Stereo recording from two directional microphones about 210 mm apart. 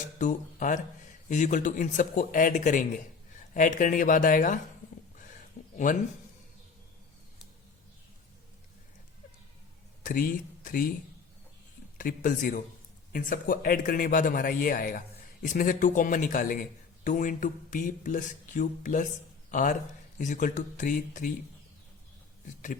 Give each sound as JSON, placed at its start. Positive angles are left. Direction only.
{"t": 0.2, "sound": "a man's voice", "side_deg": 35}
{"t": 5.2, "sound": "a sound", "side_deg": 35}
{"t": 10.0, "sound": "speech", "side_deg": 40}
{"t": 11.9, "sound": "a man's voice", "side_deg": 40}